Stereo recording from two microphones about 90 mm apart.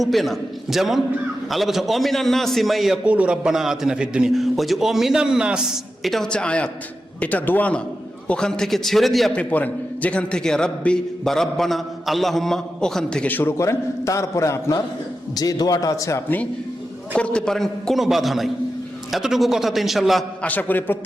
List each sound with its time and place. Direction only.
0.0 s a man's voice: centre (ahead or behind)
3.0 s a man's voice: 15° right (ahead or behind)
9.3 s a man's voice: 15° left (ahead or behind)
13.2 s a man's voice: 25° left (ahead or behind)
15.4 s a man's voice: 45° left (ahead or behind)
17.2 s a man's voice: 10° left (ahead or behind)
20.4 s a man's voice: 20° left (ahead or behind)